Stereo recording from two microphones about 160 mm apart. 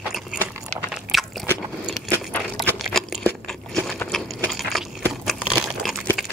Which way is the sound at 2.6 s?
Centre (ahead or behind).